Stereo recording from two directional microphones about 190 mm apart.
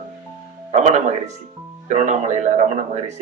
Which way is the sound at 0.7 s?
40° right (ahead or behind).